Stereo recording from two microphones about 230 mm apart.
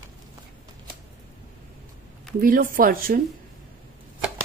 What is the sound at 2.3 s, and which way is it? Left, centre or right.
Speech, right.